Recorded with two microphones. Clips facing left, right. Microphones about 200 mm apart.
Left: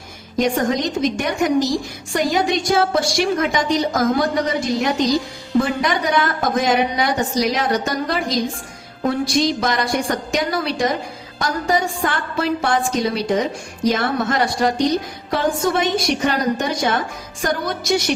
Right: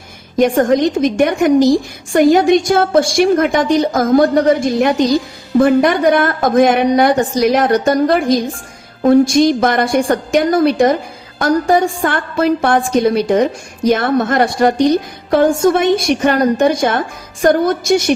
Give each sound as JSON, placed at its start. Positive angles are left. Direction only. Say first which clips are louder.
{"t": 0.3, "sound": "a woman's voice", "louder": "right 7 dB", "side_deg": -55}